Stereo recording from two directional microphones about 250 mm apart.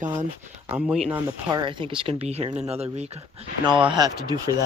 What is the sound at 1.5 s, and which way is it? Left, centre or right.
Speech, centre.